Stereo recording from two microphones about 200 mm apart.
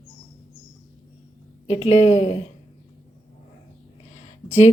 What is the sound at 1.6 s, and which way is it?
Speech, 30° left (ahead or behind).